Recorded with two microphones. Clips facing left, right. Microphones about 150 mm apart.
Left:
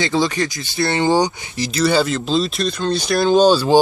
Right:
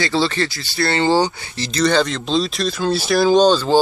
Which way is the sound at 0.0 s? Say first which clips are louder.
Left 1 dB; 15° left (ahead or behind).